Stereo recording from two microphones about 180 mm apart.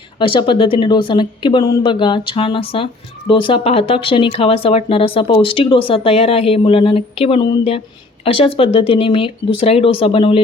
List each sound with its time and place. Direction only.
0.2 s speech: 25° left (ahead or behind)